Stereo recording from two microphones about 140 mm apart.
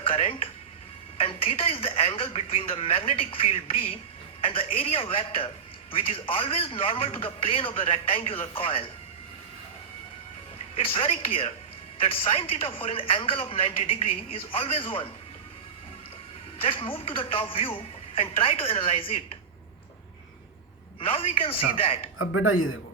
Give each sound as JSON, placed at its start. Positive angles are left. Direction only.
{"t": 0.0, "sound": "speech", "side_deg": 40}
{"t": 10.8, "sound": "a woman's voice", "side_deg": 45}
{"t": 16.6, "sound": "speech", "side_deg": 40}
{"t": 21.0, "sound": "speech", "side_deg": 40}